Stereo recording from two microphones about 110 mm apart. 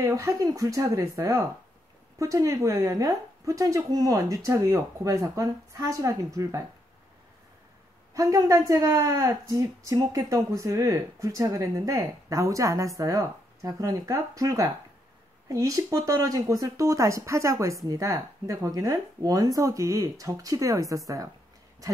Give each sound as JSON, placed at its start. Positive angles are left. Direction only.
{"t": 0.0, "sound": "speech", "side_deg": -30}
{"t": 8.1, "sound": "speech", "side_deg": -30}